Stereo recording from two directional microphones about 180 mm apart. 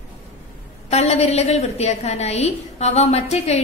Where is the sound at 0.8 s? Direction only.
35° left (ahead or behind).